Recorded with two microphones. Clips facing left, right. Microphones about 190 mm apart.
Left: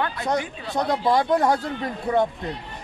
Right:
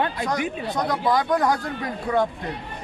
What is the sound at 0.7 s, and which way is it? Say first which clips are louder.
Speech: left 3 dB; 25° left (ahead or behind).